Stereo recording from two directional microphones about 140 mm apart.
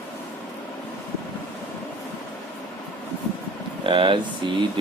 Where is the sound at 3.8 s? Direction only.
35° right (ahead or behind).